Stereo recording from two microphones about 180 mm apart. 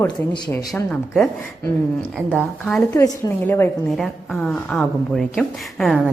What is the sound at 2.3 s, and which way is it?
Speech, 5° left (ahead or behind).